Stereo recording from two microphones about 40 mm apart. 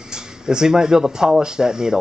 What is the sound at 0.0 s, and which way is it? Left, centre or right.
Speech, centre.